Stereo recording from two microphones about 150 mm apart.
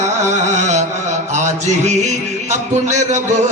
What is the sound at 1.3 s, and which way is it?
Mantra, 50° right (ahead or behind).